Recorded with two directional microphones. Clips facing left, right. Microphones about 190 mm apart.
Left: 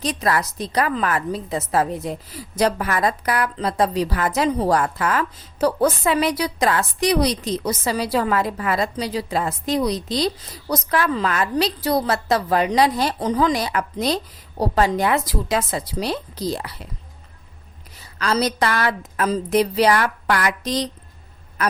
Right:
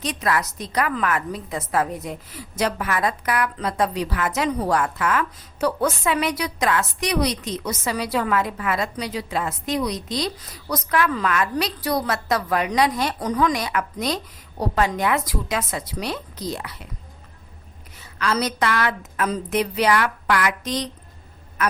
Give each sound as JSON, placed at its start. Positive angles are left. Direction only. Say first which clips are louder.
{"t": 0.0, "sound": "a woman's voice", "louder": "left 2 dB", "side_deg": 35}
{"t": 17.9, "sound": "a woman's voice", "louder": "left 2 dB", "side_deg": 35}